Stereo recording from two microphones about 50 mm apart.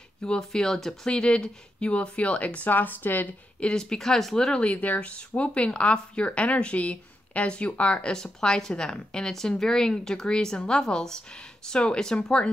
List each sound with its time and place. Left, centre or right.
0.2 s a woman's voice: centre
1.0 s speech: centre; by 3.3 s left
3.7 s a woman's voice: centre
4.5 s speech: centre
4.7 s a woman's voice: left